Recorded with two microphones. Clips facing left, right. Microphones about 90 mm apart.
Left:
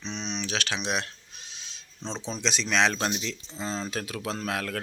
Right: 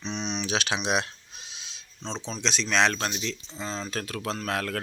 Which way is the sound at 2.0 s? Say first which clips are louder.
Even; 10° left (ahead or behind).